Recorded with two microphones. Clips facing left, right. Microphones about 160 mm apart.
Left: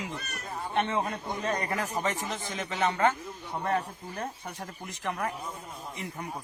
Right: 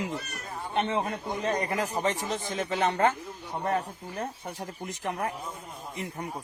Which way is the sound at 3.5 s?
5° right (ahead or behind).